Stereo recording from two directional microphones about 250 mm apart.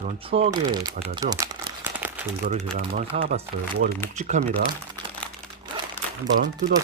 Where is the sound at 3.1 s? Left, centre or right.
Right.